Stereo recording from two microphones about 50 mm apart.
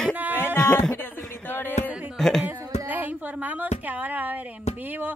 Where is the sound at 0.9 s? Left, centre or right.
Left.